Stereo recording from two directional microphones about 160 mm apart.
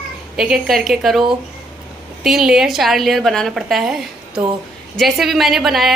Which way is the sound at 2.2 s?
5° right (ahead or behind).